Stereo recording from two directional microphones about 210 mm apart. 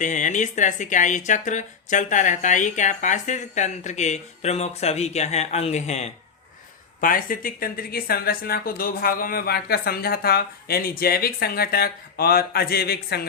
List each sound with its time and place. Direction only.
0.0 s speech: 35° left (ahead or behind)
7.0 s speech: 40° left (ahead or behind)